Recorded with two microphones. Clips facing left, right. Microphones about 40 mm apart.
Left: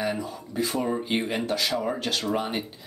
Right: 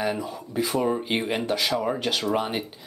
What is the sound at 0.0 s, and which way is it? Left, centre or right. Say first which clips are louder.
Speech: right 1 dB; centre.